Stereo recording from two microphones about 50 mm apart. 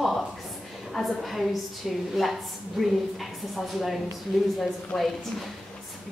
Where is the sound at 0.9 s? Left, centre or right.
Centre.